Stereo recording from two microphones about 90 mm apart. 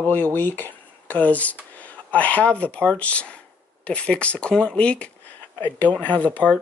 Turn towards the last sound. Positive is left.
turn(degrees=15)  # may be behind; listen again after turning